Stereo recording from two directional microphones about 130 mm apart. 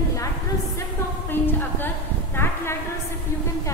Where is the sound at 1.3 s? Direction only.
15° left (ahead or behind).